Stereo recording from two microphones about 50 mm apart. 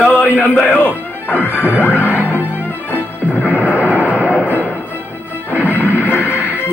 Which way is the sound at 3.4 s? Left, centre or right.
Right.